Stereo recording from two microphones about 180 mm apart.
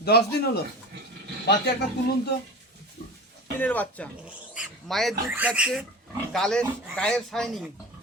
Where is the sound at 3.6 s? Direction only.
10° left (ahead or behind).